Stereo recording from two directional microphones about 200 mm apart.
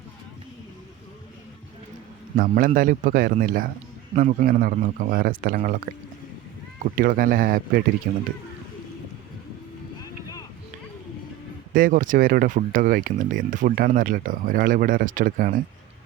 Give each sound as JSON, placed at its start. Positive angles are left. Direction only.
{"t": 2.3, "sound": "speech", "side_deg": -45}
{"t": 6.9, "sound": "speech", "side_deg": -45}
{"t": 11.7, "sound": "speech", "side_deg": -45}